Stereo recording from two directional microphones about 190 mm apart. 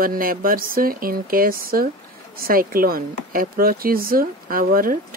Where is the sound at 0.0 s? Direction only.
50° right (ahead or behind).